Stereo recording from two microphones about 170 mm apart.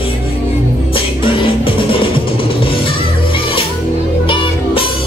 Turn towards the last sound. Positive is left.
turn(degrees=30)  # may be behind; listen again after turning